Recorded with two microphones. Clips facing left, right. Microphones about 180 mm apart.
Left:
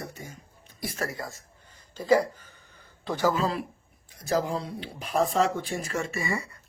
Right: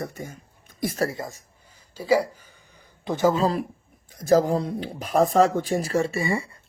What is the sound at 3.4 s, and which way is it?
Speech, 35° right (ahead or behind).